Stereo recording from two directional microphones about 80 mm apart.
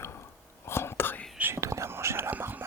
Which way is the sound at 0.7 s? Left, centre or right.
Left.